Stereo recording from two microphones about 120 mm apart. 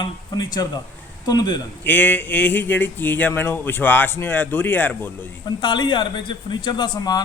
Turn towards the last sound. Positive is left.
turn(degrees=35)  # may be behind; listen again after turning